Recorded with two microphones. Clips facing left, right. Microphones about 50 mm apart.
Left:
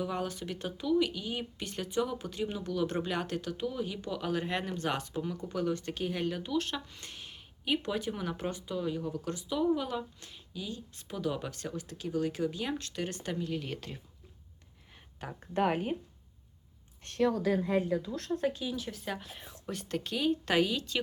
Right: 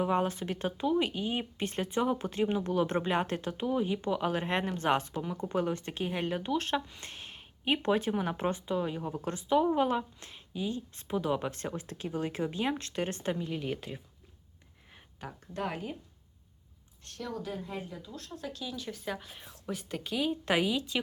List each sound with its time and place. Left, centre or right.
0.0 s speech: right
7.0 s a sound: right
8.1 s speech: right
13.4 s a woman's voice: centre
15.2 s a woman's voice: centre
15.5 s speech: left
17.2 s speech: left
18.5 s a woman's voice: centre
18.9 s a woman's voice: centre